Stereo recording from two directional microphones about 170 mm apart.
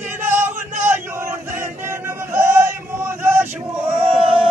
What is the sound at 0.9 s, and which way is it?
Chant, 15° right (ahead or behind).